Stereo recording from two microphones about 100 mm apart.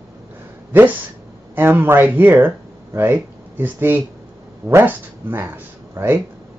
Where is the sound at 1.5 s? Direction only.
20° right (ahead or behind).